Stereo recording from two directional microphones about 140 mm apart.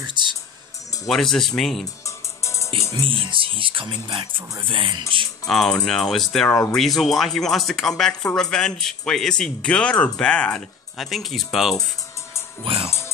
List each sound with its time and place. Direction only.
0.0 s music: 35° right (ahead or behind)
1.0 s speech: 5° left (ahead or behind)
2.0 s music: 20° left (ahead or behind)
3.0 s speech: 35° right (ahead or behind)
5.5 s speech: centre (ahead or behind)
12.7 s speech: 40° right (ahead or behind)